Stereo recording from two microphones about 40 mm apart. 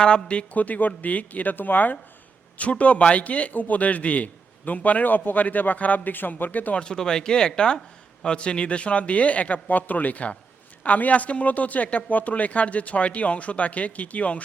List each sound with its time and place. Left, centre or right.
0.0 s speech: left
0.5 s speech: left
2.6 s a man's voice: left
6.7 s a man's voice: centre; by 14.4 s left